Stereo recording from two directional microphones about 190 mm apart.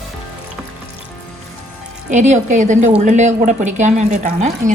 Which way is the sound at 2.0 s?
40° right (ahead or behind).